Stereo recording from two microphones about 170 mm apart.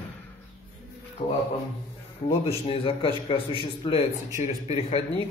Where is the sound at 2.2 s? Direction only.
30° left (ahead or behind).